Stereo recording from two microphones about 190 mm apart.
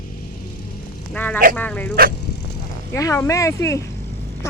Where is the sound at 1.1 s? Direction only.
10° left (ahead or behind).